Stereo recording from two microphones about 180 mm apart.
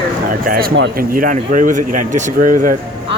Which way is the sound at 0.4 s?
55° right (ahead or behind).